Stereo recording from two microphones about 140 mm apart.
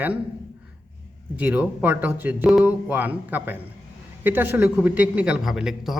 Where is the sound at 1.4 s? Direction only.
10° right (ahead or behind).